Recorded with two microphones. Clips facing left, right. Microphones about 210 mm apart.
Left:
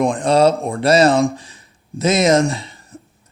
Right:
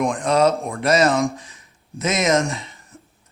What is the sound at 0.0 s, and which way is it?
Speech, 30° left (ahead or behind).